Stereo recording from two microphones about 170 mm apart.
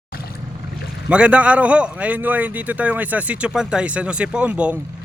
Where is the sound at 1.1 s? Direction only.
5° right (ahead or behind).